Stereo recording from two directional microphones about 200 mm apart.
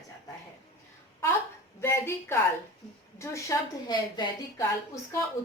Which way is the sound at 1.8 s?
15° left (ahead or behind).